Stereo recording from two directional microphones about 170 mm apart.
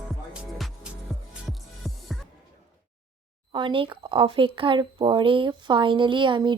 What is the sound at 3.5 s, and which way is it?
Speech, 30° right (ahead or behind).